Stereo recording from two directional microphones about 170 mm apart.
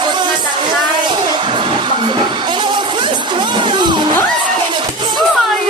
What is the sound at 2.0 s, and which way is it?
Music, 25° right (ahead or behind).